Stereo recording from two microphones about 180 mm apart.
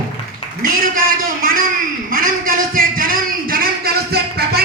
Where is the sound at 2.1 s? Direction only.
50° right (ahead or behind).